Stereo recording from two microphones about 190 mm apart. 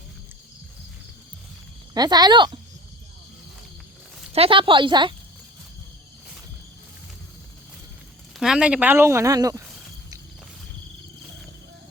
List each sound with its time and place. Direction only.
1.9 s speech: 20° right (ahead or behind)
4.3 s speech: 30° right (ahead or behind)
8.4 s speech: 5° right (ahead or behind)